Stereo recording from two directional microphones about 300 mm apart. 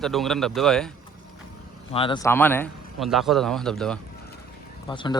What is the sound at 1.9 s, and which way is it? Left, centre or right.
Speech, centre.